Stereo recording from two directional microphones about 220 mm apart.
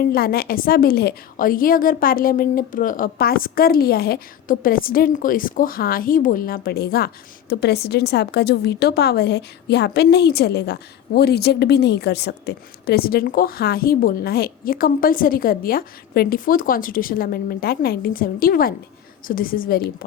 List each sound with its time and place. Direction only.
0.0 s a woman's voice: 45° left (ahead or behind)